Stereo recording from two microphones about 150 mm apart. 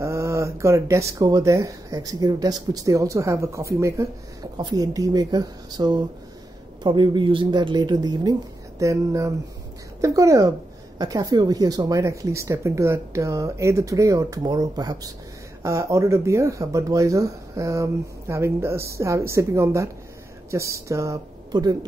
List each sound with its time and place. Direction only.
0.0 s speech: 20° right (ahead or behind)